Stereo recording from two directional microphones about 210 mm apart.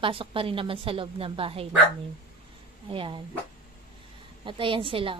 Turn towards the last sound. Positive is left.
turn(degrees=-25)  # may be behind; listen again after turning